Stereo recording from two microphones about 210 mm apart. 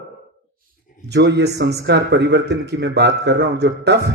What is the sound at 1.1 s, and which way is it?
Speech, 55° right (ahead or behind).